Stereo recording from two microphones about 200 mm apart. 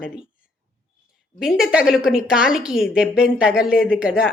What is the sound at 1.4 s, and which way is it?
Speech, 5° right (ahead or behind).